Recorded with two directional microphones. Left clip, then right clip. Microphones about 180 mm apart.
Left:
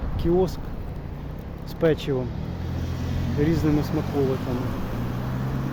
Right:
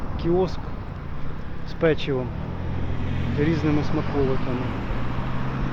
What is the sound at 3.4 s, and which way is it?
Speech, 25° left (ahead or behind).